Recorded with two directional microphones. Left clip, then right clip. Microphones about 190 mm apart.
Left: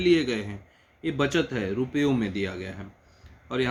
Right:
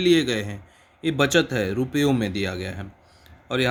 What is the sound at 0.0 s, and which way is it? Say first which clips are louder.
Speech: right 3 dB; 55° right (ahead or behind).